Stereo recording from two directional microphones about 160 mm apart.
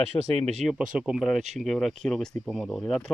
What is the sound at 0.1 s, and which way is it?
Speech, 20° left (ahead or behind).